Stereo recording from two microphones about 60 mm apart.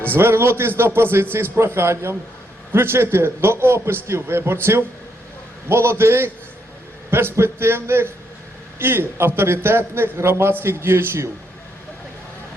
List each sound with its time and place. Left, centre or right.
0.2 s a man's voice: right
5.6 s a man's voice: right